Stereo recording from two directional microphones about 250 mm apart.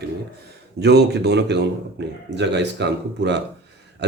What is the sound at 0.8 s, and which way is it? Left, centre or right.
Speech, right.